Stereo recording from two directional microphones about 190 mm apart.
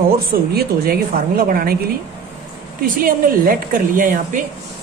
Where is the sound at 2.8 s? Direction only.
50° right (ahead or behind).